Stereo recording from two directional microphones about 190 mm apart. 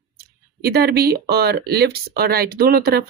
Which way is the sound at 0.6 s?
55° right (ahead or behind).